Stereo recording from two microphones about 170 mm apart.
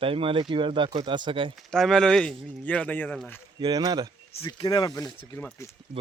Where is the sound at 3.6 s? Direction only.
25° right (ahead or behind).